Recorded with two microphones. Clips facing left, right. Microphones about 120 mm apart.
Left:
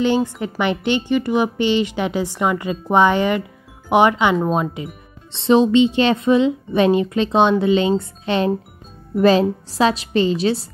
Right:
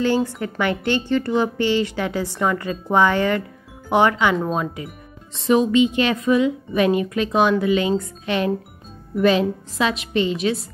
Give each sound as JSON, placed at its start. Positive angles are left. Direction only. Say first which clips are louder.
{"t": 0.0, "sound": "a woman's voice", "louder": "left 2 dB", "side_deg": 20}